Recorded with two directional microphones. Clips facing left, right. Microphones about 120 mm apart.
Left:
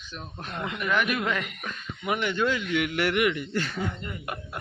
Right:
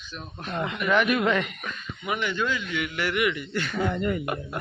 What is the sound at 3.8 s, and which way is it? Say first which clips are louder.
Speech: right 7 dB; 85° right.